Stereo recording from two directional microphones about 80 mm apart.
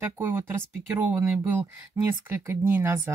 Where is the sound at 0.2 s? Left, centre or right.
Right.